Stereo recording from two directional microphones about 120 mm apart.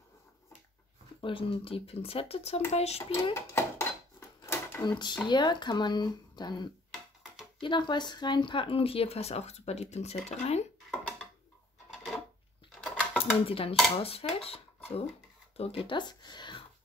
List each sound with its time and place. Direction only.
1.2 s speech: 50° left (ahead or behind)
3.3 s a sound: 20° left (ahead or behind)
4.8 s speech: 40° left (ahead or behind); by 10.6 s 65° left (ahead or behind)
11.9 s drawer open or close: centre (ahead or behind)
13.2 s speech: 50° left (ahead or behind)